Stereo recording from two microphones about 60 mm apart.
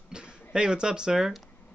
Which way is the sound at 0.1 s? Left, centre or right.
Centre.